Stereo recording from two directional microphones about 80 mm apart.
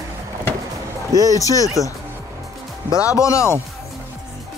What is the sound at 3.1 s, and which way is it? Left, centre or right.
Speech, left.